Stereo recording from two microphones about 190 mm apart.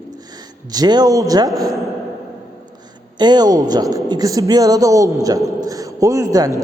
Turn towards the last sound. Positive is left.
turn(degrees=-20)  # may be behind; listen again after turning